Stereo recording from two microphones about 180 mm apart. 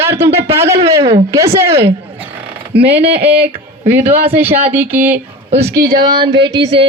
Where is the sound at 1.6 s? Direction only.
35° right (ahead or behind).